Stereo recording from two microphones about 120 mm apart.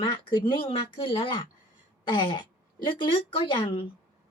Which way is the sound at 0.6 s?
50° left (ahead or behind).